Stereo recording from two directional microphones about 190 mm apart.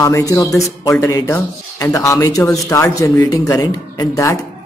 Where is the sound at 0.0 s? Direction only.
15° left (ahead or behind).